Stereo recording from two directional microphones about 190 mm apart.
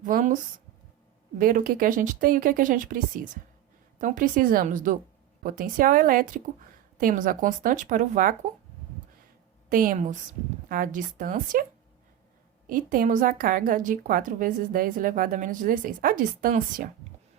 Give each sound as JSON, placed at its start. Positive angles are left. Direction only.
{"t": 0.0, "sound": "a woman's voice", "side_deg": -40}
{"t": 1.4, "sound": "a woman's voice", "side_deg": -45}
{"t": 9.6, "sound": "a woman's voice", "side_deg": -45}
{"t": 12.6, "sound": "a woman's voice", "side_deg": -45}